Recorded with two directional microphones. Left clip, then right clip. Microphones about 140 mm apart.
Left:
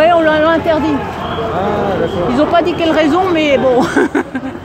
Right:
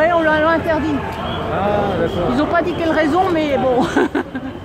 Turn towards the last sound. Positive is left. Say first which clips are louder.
# left 4 dB
turn(degrees=10)  # may be behind; listen again after turning